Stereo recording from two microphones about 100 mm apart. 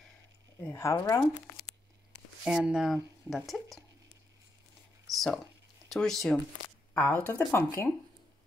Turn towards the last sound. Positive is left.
turn(degrees=25)  # may be behind; listen again after turning